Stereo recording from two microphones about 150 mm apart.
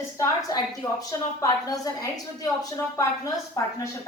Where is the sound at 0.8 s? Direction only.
25° left (ahead or behind).